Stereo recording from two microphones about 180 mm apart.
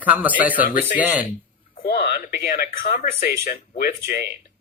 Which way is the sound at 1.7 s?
60° left (ahead or behind).